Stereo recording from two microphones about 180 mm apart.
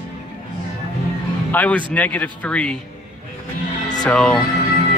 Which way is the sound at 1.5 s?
10° left (ahead or behind).